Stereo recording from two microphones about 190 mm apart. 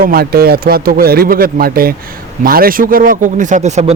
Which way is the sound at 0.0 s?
50° right (ahead or behind).